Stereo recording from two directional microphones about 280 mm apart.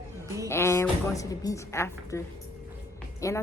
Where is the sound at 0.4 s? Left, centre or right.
Centre.